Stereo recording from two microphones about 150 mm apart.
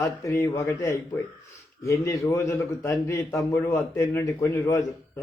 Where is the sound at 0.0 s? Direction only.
20° left (ahead or behind).